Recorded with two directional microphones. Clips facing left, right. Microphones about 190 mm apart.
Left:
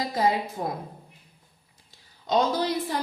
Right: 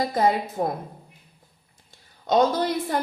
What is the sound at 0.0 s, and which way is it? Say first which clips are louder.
Speech: right 3 dB; 50° right (ahead or behind).